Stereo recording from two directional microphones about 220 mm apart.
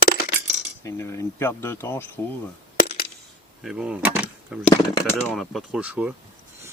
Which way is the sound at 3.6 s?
Centre (ahead or behind).